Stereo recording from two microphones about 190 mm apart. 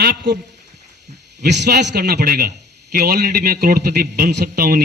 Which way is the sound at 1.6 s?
60° right (ahead or behind).